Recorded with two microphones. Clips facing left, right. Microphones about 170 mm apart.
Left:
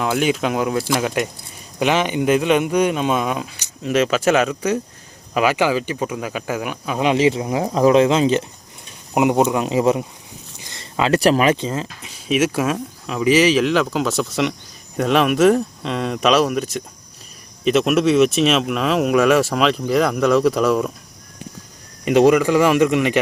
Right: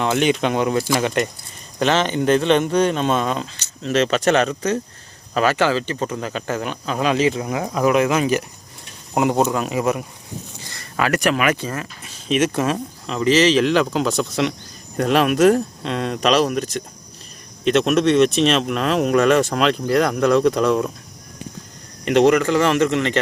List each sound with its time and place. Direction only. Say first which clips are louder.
0.0 s speech: right 1 dB; 5° left (ahead or behind)
7.1 s speech: left 3 dB; 25° left (ahead or behind)
10.6 s a sound: left 2 dB; 20° left (ahead or behind)
11.2 s speech: left 5 dB; 35° left (ahead or behind)
11.5 s speech: left 3 dB; 20° left (ahead or behind); by 20.9 s centre (ahead or behind)
22.0 s speech: left 1 dB; 10° left (ahead or behind)